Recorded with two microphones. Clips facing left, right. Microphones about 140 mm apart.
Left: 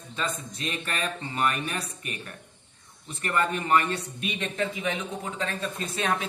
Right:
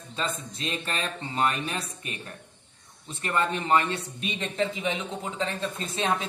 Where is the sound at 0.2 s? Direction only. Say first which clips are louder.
Even; 30° right (ahead or behind).